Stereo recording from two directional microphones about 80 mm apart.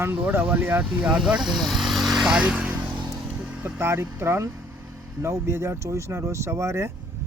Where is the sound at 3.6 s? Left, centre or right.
Right.